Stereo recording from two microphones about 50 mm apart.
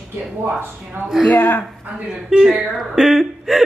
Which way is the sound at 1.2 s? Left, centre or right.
Left.